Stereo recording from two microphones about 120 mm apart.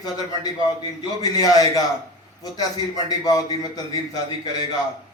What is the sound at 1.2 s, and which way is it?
Speech, 30° left (ahead or behind).